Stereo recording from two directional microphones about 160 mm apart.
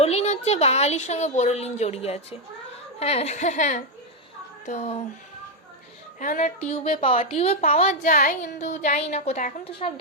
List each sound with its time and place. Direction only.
0.0 s a woman's voice: 40° left (ahead or behind)
6.1 s a child's voice: 55° left (ahead or behind)
6.7 s a woman's voice: 35° left (ahead or behind)